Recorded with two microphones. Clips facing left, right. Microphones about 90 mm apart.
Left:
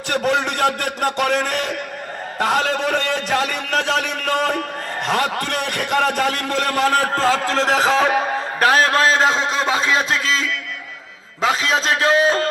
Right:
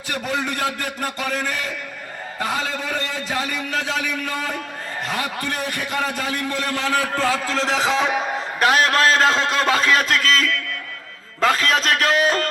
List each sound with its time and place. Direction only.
0.1 s a man's voice: 70° left (ahead or behind)
6.8 s a man's voice: 35° left (ahead or behind)